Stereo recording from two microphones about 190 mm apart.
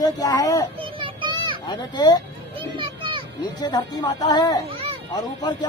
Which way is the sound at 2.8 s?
25° right (ahead or behind).